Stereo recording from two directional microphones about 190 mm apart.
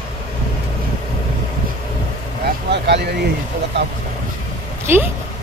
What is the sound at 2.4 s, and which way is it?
Vehicle, 65° right (ahead or behind).